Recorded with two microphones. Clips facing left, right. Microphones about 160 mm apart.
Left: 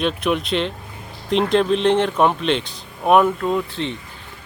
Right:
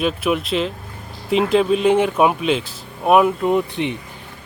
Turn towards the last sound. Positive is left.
turn(degrees=-20)  # may be behind; listen again after turning